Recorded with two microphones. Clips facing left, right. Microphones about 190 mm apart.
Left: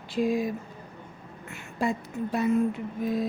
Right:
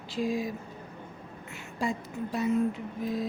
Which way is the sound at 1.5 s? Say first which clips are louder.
Left 3 dB; 55° left (ahead or behind).